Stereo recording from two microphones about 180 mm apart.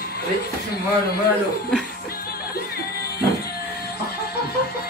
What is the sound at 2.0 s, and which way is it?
Music, 55° left (ahead or behind).